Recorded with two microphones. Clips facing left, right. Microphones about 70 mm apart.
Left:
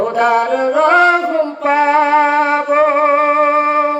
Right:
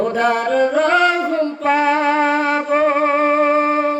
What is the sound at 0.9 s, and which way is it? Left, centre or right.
Music, left.